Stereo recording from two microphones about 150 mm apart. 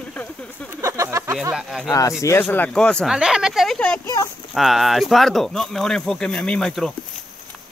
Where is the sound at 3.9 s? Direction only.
20° left (ahead or behind).